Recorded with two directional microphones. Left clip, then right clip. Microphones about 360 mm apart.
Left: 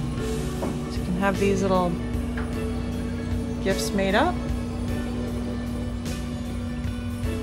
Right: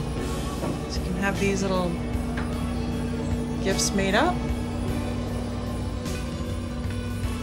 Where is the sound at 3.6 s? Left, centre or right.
Centre.